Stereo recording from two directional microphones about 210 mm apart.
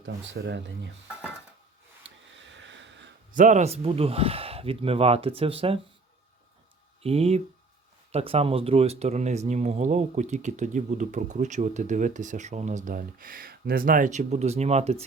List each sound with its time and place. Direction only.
0.0 s speech: 60° right (ahead or behind)
2.0 s a sound: 60° right (ahead or behind)
3.3 s speech: 35° right (ahead or behind)
7.0 s speech: 30° right (ahead or behind)